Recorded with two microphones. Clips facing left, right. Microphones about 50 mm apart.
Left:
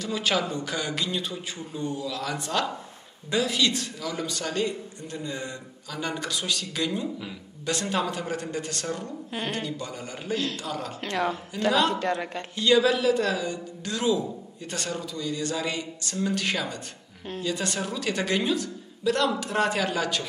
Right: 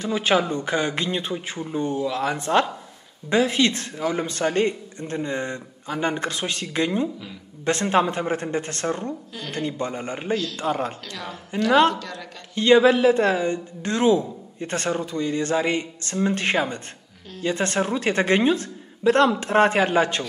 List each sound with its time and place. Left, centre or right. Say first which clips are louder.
0.0 s a man's voice: right 5 dB; right
9.3 s a woman's voice: left 3 dB; left
9.6 s a man's voice: right 6 dB; right
11.1 s a woman's voice: left 7 dB; left
12.5 s a man's voice: right 6 dB; right